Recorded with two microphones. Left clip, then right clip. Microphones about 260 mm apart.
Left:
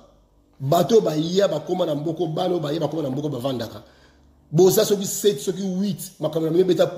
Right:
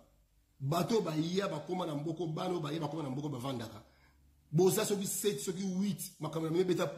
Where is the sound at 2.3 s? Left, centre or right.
Centre.